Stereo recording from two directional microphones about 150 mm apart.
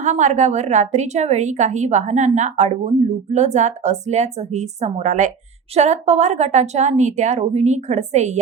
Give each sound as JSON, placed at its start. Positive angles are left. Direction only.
{"t": 0.0, "sound": "a woman's voice", "side_deg": -55}